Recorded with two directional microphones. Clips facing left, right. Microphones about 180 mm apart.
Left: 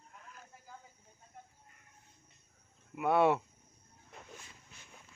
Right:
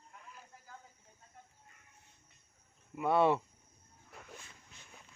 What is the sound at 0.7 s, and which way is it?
Cricket, 15° left (ahead or behind).